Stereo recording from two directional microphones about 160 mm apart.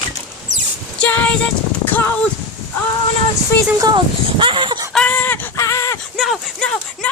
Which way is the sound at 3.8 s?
30° right (ahead or behind).